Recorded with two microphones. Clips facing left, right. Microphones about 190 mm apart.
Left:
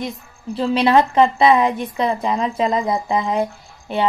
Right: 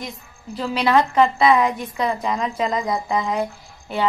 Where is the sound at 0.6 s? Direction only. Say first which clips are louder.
Left 3 dB; 25° left (ahead or behind).